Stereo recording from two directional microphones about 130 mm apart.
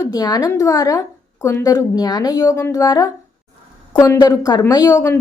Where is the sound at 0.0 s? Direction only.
30° left (ahead or behind).